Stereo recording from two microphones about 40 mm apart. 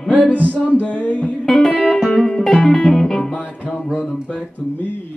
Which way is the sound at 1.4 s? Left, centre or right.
Centre.